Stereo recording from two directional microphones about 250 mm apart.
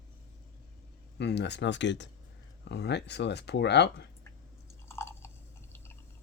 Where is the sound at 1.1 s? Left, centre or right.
Left.